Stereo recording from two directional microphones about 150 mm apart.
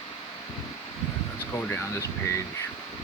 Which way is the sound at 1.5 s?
20° left (ahead or behind).